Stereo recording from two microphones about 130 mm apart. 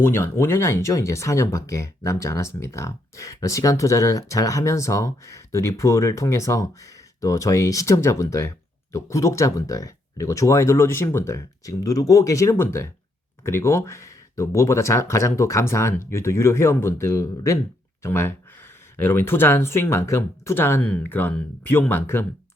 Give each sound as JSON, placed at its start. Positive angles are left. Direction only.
{"t": 0.0, "sound": "speech", "side_deg": 20}